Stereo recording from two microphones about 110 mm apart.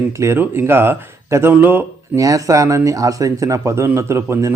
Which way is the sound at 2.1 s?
30° right (ahead or behind).